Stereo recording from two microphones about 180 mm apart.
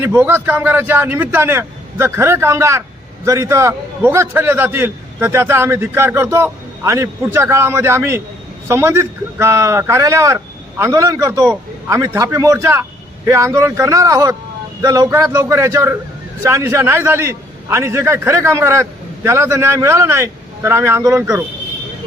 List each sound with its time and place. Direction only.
0.0 s a man's voice: 10° right (ahead or behind)